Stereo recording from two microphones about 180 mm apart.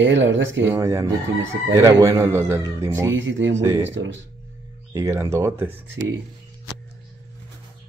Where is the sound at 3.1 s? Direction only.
90° right.